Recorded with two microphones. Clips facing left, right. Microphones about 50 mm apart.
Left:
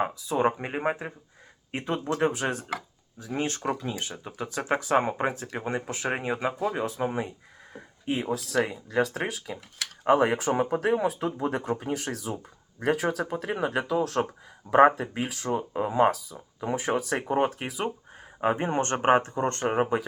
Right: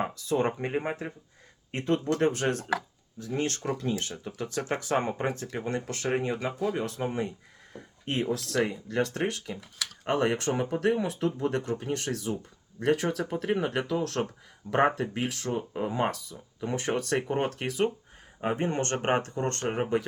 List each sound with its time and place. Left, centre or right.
0.0 s speech: centre
18.3 s speech: left